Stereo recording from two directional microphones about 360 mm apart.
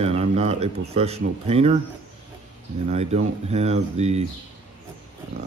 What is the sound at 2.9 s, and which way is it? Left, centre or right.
Speech, centre.